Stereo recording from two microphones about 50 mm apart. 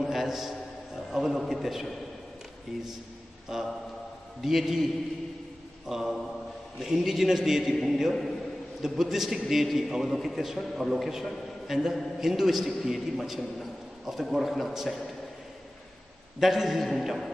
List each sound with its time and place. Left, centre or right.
0.0 s a sound: centre
1.4 s a man's voice: centre
3.5 s a man's voice: centre
5.9 s a man's voice: centre
16.3 s a man's voice: centre